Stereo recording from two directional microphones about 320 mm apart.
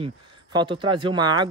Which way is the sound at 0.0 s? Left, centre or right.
Centre.